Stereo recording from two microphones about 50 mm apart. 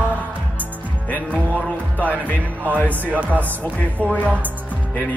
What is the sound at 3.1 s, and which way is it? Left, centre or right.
Music, right.